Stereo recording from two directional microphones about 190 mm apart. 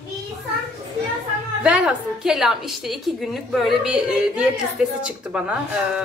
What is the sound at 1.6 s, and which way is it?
A woman's voice, 5° right (ahead or behind).